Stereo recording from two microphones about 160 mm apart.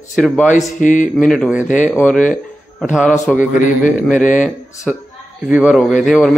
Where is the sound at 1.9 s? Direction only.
10° left (ahead or behind).